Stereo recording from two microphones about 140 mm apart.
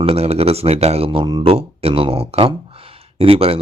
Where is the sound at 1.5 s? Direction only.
45° right (ahead or behind).